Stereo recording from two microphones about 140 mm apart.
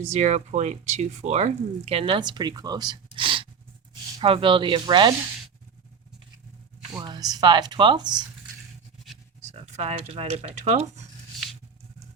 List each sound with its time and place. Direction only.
0.0 s speech: 55° right (ahead or behind); by 5.1 s 35° right (ahead or behind)
7.0 s speech: 30° right (ahead or behind)
9.4 s speech: 55° right (ahead or behind)